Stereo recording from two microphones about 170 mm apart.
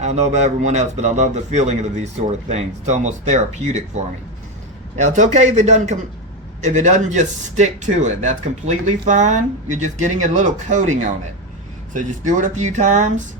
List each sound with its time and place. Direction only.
0.0 s speech: 40° right (ahead or behind)
5.0 s speech: 45° right (ahead or behind)